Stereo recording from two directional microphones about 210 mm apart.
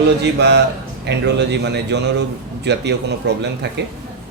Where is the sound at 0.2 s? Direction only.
55° right (ahead or behind).